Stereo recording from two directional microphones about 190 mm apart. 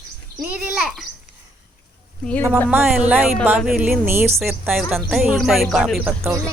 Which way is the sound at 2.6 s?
10° right (ahead or behind).